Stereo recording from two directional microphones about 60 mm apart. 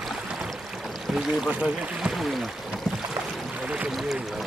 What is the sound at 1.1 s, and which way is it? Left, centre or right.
Speech, centre.